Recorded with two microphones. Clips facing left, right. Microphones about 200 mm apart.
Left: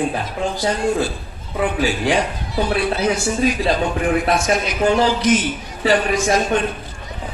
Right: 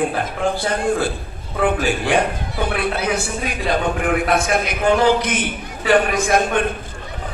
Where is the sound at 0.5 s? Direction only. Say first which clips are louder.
Left 4 dB; 55° right (ahead or behind).